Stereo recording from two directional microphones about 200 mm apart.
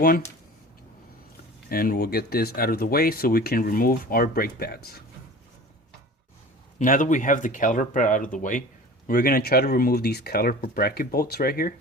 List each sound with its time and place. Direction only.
1.7 s speech: 50° left (ahead or behind)
6.7 s speech: 40° left (ahead or behind)